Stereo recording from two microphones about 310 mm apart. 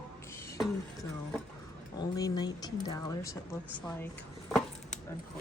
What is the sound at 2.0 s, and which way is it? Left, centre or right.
Speech, centre.